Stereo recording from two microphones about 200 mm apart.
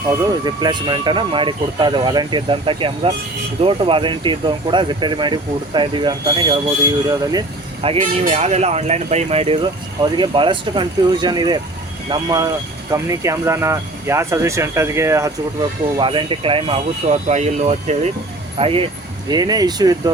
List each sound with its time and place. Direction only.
0.1 s speech: 20° right (ahead or behind)
16.0 s speech: 25° right (ahead or behind)